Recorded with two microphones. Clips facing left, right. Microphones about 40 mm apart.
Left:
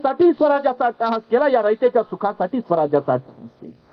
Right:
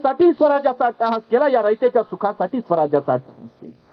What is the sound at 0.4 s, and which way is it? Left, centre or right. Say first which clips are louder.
A man's voice: right 1 dB; centre.